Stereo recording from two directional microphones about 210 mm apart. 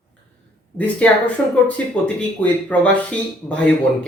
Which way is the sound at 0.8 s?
5° left (ahead or behind).